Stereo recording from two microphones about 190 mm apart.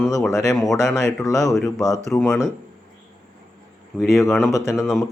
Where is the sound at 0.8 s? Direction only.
15° left (ahead or behind).